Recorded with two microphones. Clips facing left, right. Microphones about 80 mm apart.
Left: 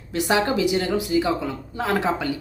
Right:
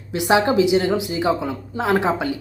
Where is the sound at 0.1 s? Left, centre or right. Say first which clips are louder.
Right 4 dB; centre.